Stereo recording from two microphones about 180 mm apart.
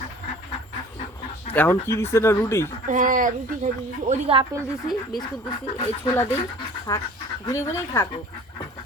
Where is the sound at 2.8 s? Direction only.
45° right (ahead or behind).